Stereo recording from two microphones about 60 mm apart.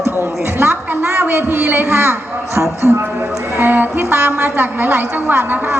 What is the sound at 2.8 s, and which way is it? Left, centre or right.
Speech, centre.